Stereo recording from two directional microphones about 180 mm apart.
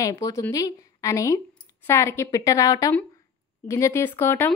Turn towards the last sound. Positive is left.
turn(degrees=15)  # may be behind; listen again after turning